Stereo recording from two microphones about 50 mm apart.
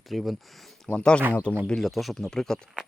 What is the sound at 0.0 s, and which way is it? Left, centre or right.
Speech, centre.